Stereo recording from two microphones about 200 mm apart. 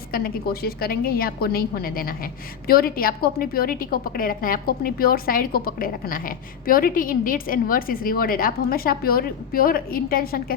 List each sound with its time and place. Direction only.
0.1 s a woman's voice: 50° left (ahead or behind)